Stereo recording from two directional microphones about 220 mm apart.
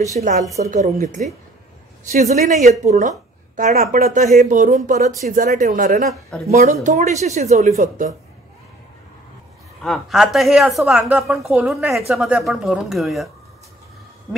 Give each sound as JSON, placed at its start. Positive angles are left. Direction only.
{"t": 0.1, "sound": "speech", "side_deg": -35}
{"t": 9.8, "sound": "a woman's voice", "side_deg": 0}